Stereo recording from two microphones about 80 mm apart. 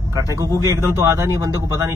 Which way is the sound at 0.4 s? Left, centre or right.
Right.